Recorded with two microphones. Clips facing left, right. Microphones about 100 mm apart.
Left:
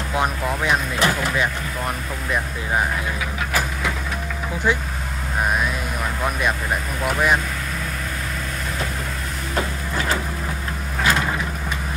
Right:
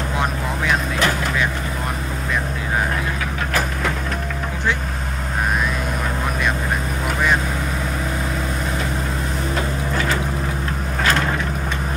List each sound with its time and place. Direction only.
0.2 s vehicle: 15° left (ahead or behind)